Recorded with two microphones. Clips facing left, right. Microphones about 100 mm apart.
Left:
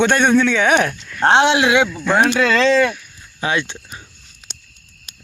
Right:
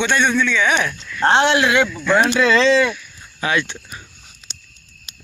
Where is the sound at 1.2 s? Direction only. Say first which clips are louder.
Left 2 dB; 15° left (ahead or behind).